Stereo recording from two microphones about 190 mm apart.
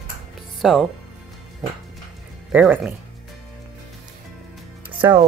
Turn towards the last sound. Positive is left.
turn(degrees=-25)  # may be behind; listen again after turning